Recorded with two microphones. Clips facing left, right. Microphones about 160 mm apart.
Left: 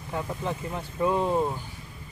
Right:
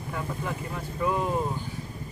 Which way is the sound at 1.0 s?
25° left (ahead or behind).